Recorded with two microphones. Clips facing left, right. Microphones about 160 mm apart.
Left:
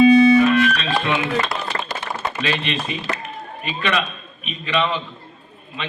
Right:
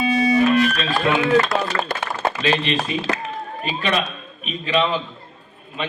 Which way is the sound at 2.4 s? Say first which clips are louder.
Right 3 dB; 40° right (ahead or behind).